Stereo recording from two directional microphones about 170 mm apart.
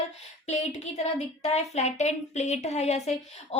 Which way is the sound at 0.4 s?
40° left (ahead or behind).